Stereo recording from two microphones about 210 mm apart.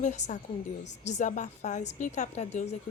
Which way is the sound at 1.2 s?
35° left (ahead or behind).